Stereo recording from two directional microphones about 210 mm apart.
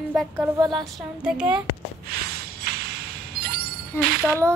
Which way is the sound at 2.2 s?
50° right (ahead or behind).